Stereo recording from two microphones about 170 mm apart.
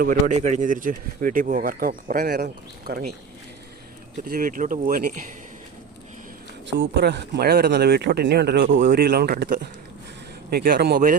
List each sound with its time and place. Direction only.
0.0 s speech: 50° right (ahead or behind)
4.2 s speech: 55° right (ahead or behind)
6.7 s speech: 85° right